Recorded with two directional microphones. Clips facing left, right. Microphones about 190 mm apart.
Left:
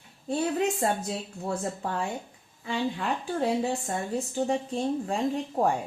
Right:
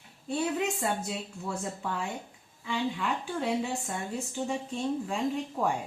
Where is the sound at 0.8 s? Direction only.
40° left (ahead or behind).